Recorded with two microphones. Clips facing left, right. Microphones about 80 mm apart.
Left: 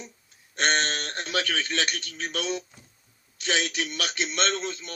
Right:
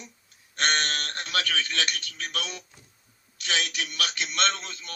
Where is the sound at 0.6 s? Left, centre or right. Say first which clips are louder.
Left 2 dB; left.